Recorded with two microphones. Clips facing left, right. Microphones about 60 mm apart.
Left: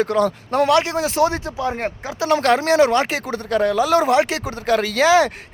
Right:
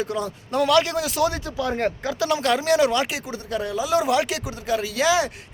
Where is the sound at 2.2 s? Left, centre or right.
Left.